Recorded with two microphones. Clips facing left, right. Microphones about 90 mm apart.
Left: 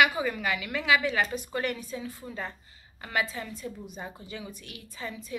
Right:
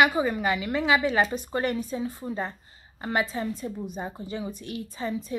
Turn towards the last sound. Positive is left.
turn(degrees=-30)  # may be behind; listen again after turning